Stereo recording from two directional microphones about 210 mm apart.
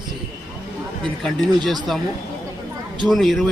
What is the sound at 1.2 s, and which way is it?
Speech, centre (ahead or behind).